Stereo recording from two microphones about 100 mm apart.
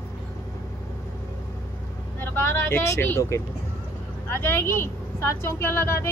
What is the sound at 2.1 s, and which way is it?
Speech, 25° left (ahead or behind).